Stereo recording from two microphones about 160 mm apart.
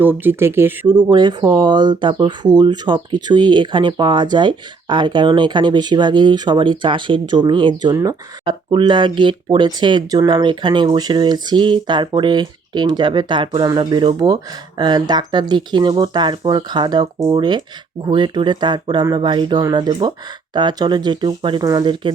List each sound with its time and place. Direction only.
0.0 s speech: 10° right (ahead or behind)
1.1 s speech: 25° right (ahead or behind)